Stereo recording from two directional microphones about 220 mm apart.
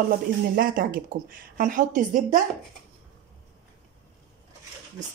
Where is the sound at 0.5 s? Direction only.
40° right (ahead or behind).